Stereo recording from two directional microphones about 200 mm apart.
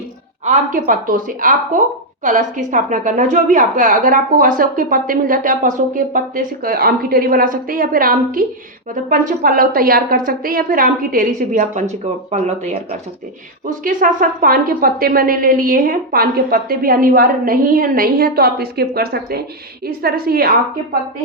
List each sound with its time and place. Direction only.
0.4 s a woman's voice: 40° right (ahead or behind)